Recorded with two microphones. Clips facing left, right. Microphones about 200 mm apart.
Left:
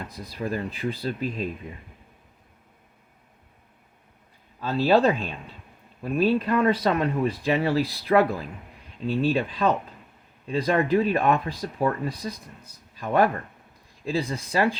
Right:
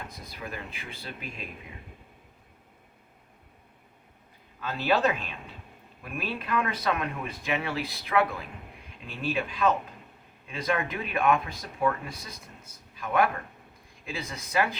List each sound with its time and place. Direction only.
0.1 s speech: 35° left (ahead or behind)
4.6 s speech: 30° left (ahead or behind)